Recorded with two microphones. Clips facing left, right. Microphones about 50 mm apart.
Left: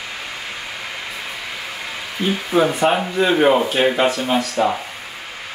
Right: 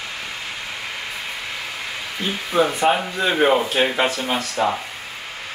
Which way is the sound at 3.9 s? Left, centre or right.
Centre.